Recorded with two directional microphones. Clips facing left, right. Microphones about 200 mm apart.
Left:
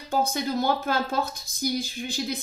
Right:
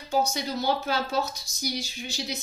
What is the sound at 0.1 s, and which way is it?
Speech, 55° left (ahead or behind).